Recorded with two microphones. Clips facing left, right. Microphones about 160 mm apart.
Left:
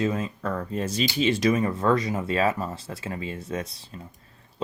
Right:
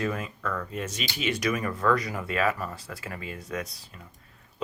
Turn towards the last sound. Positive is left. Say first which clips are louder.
# left 3 dB
turn(degrees=30)  # may be behind; listen again after turning